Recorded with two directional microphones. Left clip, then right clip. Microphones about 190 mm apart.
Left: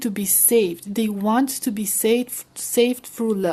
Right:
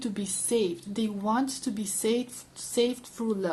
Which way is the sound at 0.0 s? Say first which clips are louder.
Left 9 dB; 50° left (ahead or behind).